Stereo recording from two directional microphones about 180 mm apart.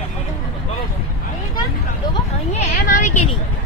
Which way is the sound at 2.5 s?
40° left (ahead or behind).